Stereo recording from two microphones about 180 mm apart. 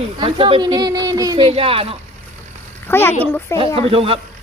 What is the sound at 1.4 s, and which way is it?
Speech, 30° right (ahead or behind).